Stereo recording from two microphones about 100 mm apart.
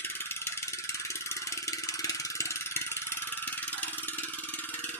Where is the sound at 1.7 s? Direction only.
30° left (ahead or behind).